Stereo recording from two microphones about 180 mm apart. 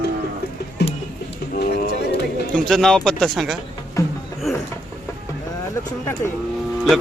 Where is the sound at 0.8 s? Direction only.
70° left (ahead or behind).